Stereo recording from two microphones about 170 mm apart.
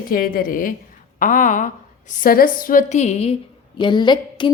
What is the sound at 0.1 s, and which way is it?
A woman's voice, 55° left (ahead or behind).